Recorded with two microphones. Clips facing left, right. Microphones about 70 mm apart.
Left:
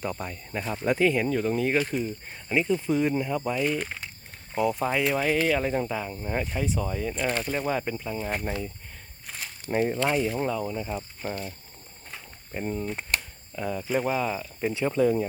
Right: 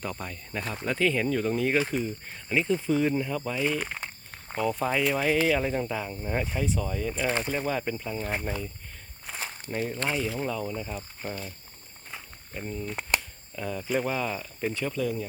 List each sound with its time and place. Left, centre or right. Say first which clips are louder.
0.0 s speech: left 3 dB; centre
7.3 s speech: right 1 dB; centre
7.5 s speech: left 1 dB; centre
9.6 s speech: left 7 dB; left
10.1 s speech: left 4 dB; centre
12.5 s speech: left 4 dB; left
13.6 s speech: left 2 dB; centre
14.8 s speech: left 10 dB; left